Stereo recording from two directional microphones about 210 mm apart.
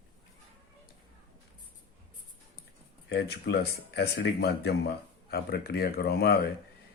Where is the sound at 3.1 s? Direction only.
50° left (ahead or behind).